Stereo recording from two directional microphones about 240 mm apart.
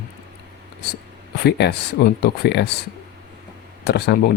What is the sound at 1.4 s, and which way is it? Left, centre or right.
Speech, left.